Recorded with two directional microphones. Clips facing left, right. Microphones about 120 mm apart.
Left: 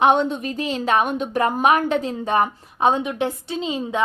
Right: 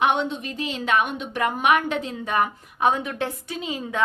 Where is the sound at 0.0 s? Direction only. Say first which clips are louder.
Left 5 dB; 40° left (ahead or behind).